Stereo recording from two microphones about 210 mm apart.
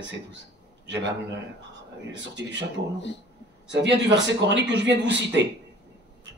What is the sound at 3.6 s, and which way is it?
Speech, 60° right (ahead or behind).